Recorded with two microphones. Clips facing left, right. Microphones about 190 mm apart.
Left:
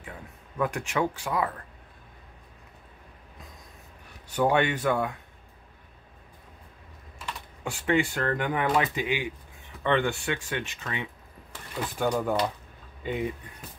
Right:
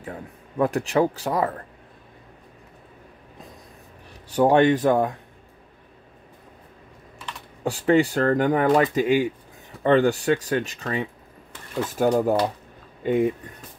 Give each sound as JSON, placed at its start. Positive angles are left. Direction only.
{"t": 0.0, "sound": "speech", "side_deg": -35}
{"t": 4.4, "sound": "speech", "side_deg": -40}
{"t": 7.6, "sound": "speech", "side_deg": -40}